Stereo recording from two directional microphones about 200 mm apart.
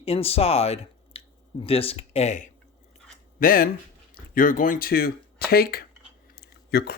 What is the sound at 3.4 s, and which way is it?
Speech, 45° left (ahead or behind).